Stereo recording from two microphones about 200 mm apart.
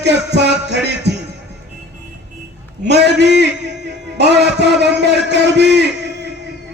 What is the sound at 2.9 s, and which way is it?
A man's voice, 60° right (ahead or behind).